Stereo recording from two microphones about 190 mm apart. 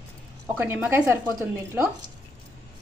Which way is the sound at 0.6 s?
10° right (ahead or behind).